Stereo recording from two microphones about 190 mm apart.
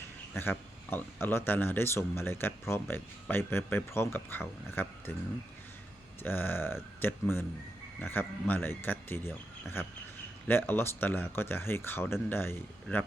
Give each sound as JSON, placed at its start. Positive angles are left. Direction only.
{"t": 0.3, "sound": "speech", "side_deg": 10}
{"t": 6.2, "sound": "speech", "side_deg": 10}